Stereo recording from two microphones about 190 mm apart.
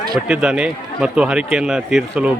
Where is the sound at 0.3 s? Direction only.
5° right (ahead or behind).